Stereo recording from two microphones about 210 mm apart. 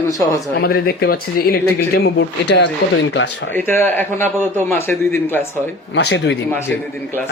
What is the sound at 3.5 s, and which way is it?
A man's voice, 10° left (ahead or behind).